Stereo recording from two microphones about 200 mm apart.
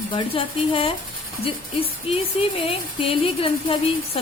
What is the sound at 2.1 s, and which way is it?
A woman's voice, 30° left (ahead or behind).